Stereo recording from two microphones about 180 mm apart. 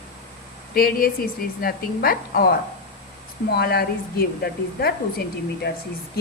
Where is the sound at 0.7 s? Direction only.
55° left (ahead or behind).